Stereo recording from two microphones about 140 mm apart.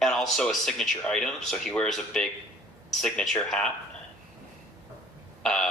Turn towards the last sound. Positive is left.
turn(degrees=5)  # may be behind; listen again after turning